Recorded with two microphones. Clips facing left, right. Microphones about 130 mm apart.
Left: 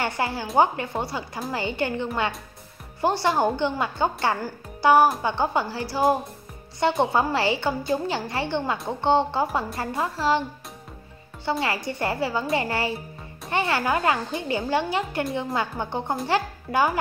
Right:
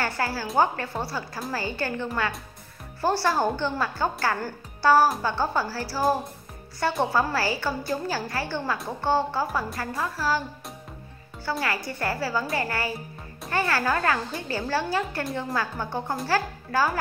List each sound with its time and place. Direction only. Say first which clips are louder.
0.0 s speech: left 1 dB; 20° left (ahead or behind)
11.6 s speech: left 2 dB; 25° left (ahead or behind)